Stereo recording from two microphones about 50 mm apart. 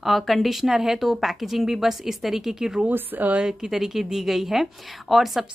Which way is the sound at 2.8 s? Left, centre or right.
Right.